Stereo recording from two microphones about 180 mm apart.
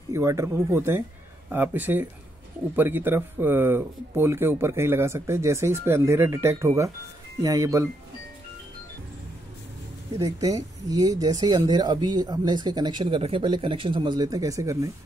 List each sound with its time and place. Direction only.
0.1 s speech: 15° right (ahead or behind)
10.1 s speech: 20° right (ahead or behind)